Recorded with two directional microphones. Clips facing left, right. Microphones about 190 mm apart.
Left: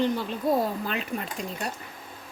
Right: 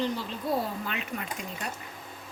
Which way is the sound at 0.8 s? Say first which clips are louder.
Left 4 dB; 35° left (ahead or behind).